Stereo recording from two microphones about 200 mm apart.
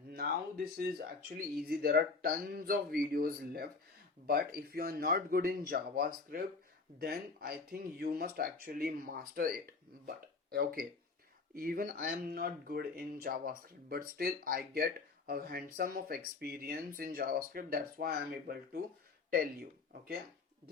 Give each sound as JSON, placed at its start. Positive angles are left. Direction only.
{"t": 0.1, "sound": "speech", "side_deg": -50}